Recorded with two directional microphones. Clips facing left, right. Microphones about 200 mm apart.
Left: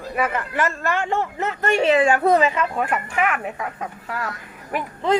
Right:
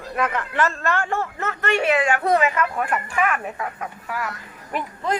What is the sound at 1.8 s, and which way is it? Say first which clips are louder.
A woman's voice: left 5 dB; 30° left (ahead or behind).